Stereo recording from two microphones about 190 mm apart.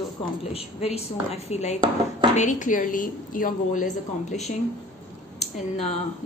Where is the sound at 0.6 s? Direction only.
35° left (ahead or behind).